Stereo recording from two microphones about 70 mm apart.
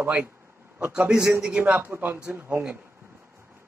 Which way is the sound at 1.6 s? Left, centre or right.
Right.